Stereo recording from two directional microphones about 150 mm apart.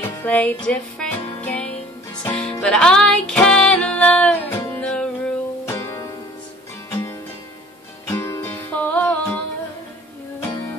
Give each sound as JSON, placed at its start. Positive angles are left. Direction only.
{"t": 0.2, "sound": "music", "side_deg": 10}
{"t": 5.7, "sound": "music", "side_deg": 20}
{"t": 8.1, "sound": "music", "side_deg": 15}